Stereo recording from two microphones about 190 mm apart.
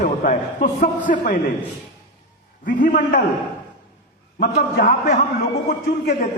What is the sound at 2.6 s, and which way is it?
Speech, 45° left (ahead or behind).